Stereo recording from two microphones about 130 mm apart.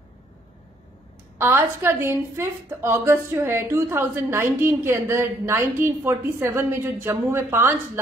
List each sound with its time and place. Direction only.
1.4 s a woman's voice: 20° right (ahead or behind)